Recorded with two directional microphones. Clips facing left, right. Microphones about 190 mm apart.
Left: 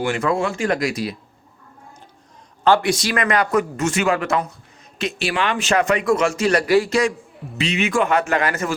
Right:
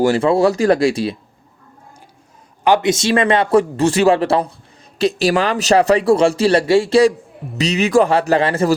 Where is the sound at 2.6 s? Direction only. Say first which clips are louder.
Right 3 dB; 20° right (ahead or behind).